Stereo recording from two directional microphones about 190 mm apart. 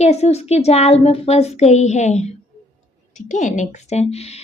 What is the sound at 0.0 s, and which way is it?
A woman's voice, 35° left (ahead or behind).